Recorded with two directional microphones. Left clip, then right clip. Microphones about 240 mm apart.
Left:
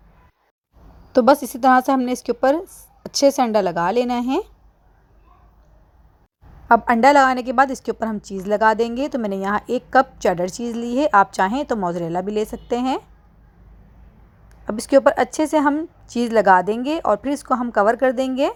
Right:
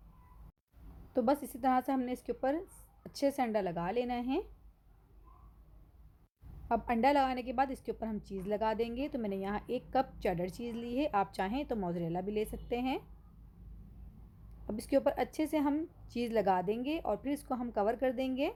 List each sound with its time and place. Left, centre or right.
1.1 s a woman's voice: left
6.7 s a woman's voice: left
14.7 s a woman's voice: left